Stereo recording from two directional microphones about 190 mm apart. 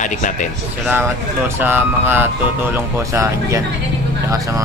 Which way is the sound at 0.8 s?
10° right (ahead or behind).